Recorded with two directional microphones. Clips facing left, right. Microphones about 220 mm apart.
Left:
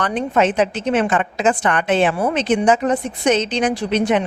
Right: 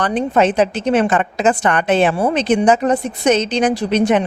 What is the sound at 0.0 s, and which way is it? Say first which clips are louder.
A woman's voice: right 2 dB; 35° right (ahead or behind).